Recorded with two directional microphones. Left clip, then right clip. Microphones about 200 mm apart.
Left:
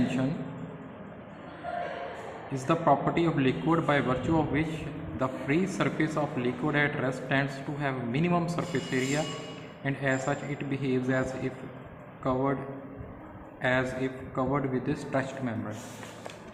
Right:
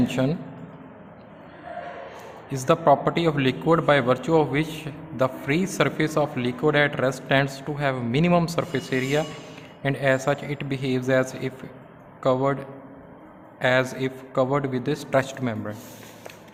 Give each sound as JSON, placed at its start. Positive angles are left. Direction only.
{"t": 2.5, "sound": "speech", "side_deg": -45}
{"t": 13.6, "sound": "speech", "side_deg": -45}